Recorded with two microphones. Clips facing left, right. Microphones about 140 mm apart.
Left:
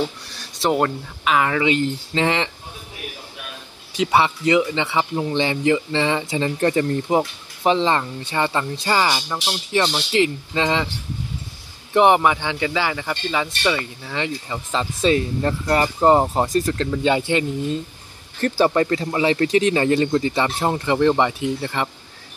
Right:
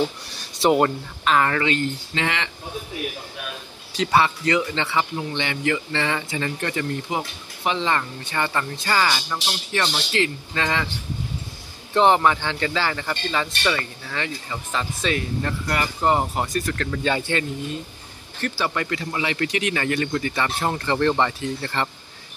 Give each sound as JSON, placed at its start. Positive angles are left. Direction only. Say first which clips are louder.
{"t": 0.6, "sound": "speech", "louder": "right 2 dB", "side_deg": -5}
{"t": 1.2, "sound": "speech", "louder": "left 1 dB", "side_deg": 5}
{"t": 2.1, "sound": "speech", "louder": "left 7 dB", "side_deg": 30}
{"t": 3.9, "sound": "speech", "louder": "left 1 dB", "side_deg": 20}
{"t": 5.1, "sound": "speech", "louder": "left 6 dB", "side_deg": 30}
{"t": 11.9, "sound": "speech", "louder": "left 2 dB", "side_deg": 15}
{"t": 18.4, "sound": "speech", "louder": "left 8 dB", "side_deg": 35}